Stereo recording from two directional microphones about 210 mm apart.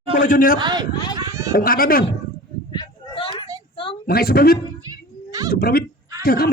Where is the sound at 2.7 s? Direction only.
20° left (ahead or behind).